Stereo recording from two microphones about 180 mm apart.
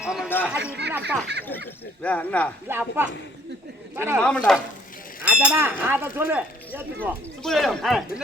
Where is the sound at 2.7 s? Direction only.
10° right (ahead or behind).